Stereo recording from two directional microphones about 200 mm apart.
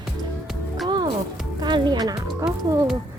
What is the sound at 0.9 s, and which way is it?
Music, 20° right (ahead or behind).